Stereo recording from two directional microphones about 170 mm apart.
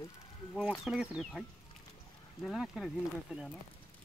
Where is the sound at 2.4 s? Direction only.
Centre (ahead or behind).